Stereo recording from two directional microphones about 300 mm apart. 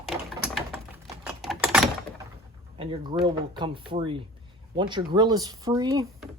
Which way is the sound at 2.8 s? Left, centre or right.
Centre.